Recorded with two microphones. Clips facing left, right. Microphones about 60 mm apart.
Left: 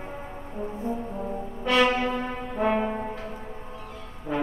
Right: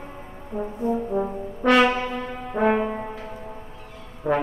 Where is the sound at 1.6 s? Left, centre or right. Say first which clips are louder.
Right 6 dB; right.